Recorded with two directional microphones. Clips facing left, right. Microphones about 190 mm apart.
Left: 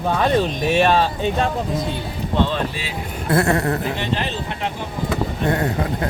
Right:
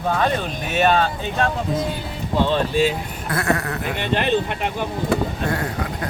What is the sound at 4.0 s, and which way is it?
Speech, 60° right (ahead or behind).